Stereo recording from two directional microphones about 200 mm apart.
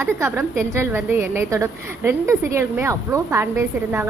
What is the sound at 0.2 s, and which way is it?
A woman's voice, 15° right (ahead or behind).